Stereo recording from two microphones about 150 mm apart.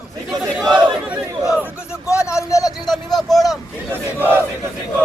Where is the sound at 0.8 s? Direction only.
10° right (ahead or behind).